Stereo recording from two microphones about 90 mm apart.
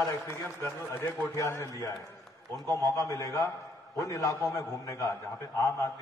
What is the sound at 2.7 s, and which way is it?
A man's voice, 35° left (ahead or behind).